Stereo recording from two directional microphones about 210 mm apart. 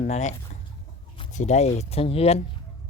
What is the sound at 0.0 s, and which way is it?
Speech, 35° left (ahead or behind).